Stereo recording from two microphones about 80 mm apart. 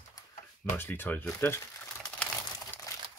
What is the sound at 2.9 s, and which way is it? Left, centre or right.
Crumpling, left.